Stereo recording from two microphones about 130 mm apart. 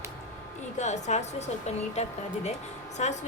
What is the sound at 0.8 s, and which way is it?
A woman's voice, 60° left (ahead or behind).